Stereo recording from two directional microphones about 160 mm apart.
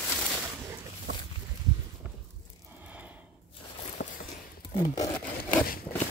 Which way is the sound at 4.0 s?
50° left (ahead or behind).